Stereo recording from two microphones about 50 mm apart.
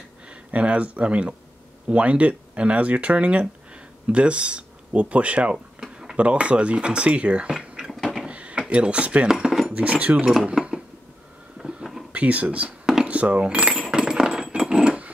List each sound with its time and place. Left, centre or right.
0.3 s speech: right
5.8 s a sound: centre
6.1 s speech: right
8.3 s drawer open or close: right
8.6 s speech: right
9.3 s dishes: centre
9.7 s speech: right
10.4 s a sound: centre
12.1 s speech: right
13.0 s cutlery: right